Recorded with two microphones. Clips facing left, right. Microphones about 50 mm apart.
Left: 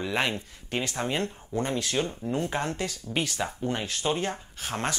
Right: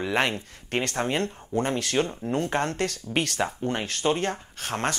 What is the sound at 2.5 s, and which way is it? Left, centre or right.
Speech, right.